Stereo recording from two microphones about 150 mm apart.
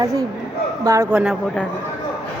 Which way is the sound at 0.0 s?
20° right (ahead or behind).